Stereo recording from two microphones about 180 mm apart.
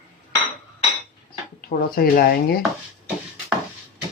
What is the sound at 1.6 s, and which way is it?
Speech, 55° left (ahead or behind).